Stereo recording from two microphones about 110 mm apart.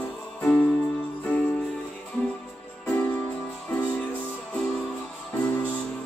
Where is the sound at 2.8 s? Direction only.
15° left (ahead or behind).